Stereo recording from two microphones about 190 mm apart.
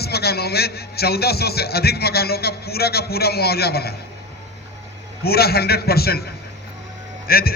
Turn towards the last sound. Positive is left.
turn(degrees=50)  # may be behind; listen again after turning